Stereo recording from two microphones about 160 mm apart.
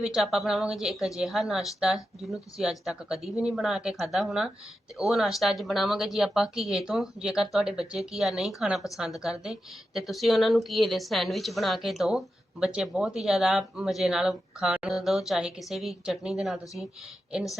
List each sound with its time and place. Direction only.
0.0 s a woman's voice: 5° right (ahead or behind)